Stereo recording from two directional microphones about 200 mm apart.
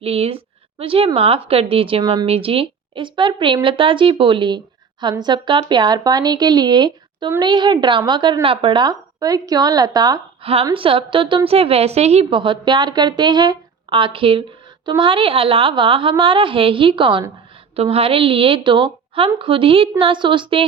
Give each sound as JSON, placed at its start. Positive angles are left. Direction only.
{"t": 0.0, "sound": "a woman's voice", "side_deg": -30}